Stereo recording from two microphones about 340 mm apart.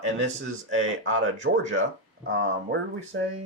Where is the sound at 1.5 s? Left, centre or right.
Right.